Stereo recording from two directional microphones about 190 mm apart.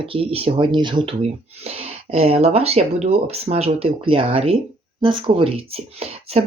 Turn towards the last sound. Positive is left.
turn(degrees=-35)  # may be behind; listen again after turning